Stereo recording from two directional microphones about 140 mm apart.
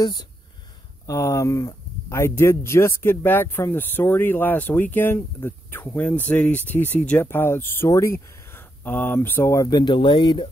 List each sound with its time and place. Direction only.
0.0 s speech: 30° left (ahead or behind)